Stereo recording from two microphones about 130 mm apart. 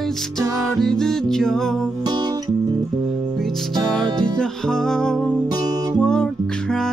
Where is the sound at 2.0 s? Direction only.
30° right (ahead or behind).